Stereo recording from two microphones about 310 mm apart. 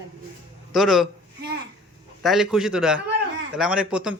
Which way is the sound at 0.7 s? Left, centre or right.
Centre.